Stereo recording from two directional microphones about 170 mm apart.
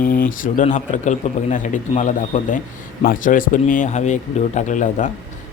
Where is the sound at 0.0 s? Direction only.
55° left (ahead or behind).